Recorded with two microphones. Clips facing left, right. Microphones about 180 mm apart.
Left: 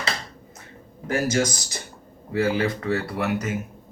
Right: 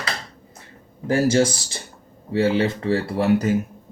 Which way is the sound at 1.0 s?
30° right (ahead or behind).